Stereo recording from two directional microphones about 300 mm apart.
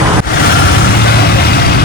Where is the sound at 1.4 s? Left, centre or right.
Left.